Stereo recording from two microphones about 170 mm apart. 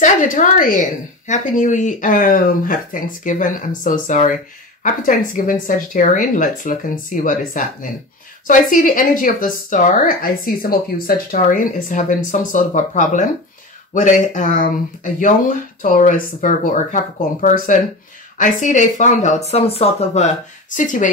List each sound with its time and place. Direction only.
0.0 s speech: 50° left (ahead or behind)
20.7 s speech: 50° left (ahead or behind)